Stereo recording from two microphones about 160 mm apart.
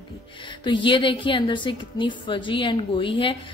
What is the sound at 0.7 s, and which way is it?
A woman's voice, 30° left (ahead or behind).